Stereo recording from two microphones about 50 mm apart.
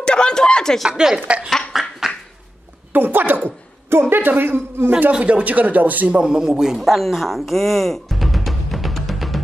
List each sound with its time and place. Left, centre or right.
0.0 s a sound: centre
0.8 s speech: centre
1.7 s a sound: centre
2.9 s a man's voice: right
5.2 s a man's voice: right
6.1 s speech: centre